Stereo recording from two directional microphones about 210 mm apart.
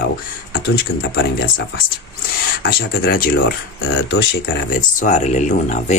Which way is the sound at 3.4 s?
70° left (ahead or behind).